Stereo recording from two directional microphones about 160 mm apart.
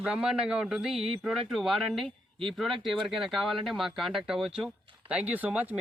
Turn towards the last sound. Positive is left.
turn(degrees=-10)  # may be behind; listen again after turning